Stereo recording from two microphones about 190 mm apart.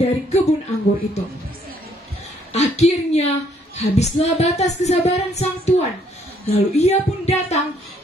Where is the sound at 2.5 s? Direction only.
35° left (ahead or behind).